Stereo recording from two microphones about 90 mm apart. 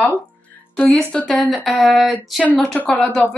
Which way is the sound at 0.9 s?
5° left (ahead or behind).